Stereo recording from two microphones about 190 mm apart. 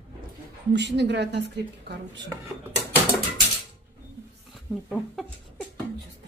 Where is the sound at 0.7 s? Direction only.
65° right (ahead or behind).